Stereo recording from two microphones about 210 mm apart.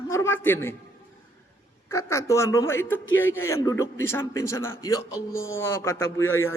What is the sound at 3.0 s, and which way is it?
Speech, 70° left (ahead or behind).